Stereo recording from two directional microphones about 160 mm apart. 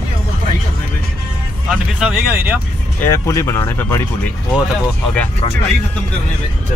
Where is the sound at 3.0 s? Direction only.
20° left (ahead or behind).